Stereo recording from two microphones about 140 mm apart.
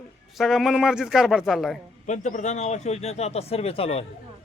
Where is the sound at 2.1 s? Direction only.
60° left (ahead or behind); by 4.0 s 45° left (ahead or behind).